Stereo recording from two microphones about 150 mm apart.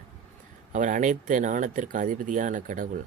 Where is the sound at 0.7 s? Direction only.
55° right (ahead or behind).